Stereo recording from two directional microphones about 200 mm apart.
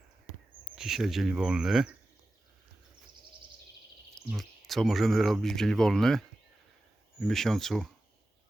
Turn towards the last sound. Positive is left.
turn(degrees=0)  # may be behind; listen again after turning